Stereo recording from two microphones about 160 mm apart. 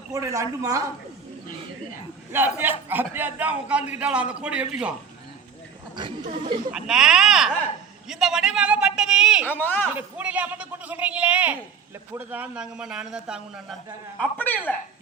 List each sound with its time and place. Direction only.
0.1 s a man's voice: 20° right (ahead or behind)
2.3 s speech: 10° right (ahead or behind)
6.7 s a man's voice: 5° right (ahead or behind)
9.5 s speech: 10° left (ahead or behind)
9.9 s a man's voice: 10° right (ahead or behind)
14.2 s speech: 10° left (ahead or behind)